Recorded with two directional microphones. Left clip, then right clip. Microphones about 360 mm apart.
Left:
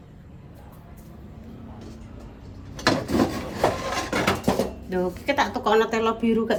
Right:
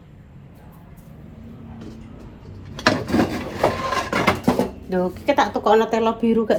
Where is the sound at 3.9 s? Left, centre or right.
Centre.